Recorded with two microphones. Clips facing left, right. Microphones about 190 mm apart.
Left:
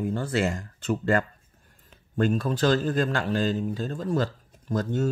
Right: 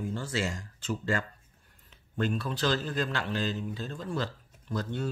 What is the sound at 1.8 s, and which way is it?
A man's voice, 45° left (ahead or behind).